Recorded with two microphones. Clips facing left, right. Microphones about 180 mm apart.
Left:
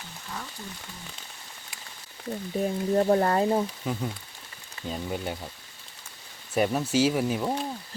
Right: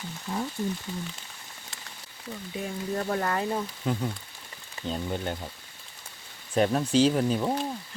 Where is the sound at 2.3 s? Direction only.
40° left (ahead or behind).